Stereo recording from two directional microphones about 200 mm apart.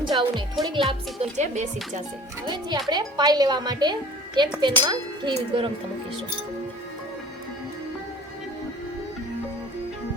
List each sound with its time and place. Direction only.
0.0 s music: 25° right (ahead or behind)
0.6 s speech: 25° right (ahead or behind)
1.4 s speech: 35° right (ahead or behind)
2.5 s speech: 20° right (ahead or behind)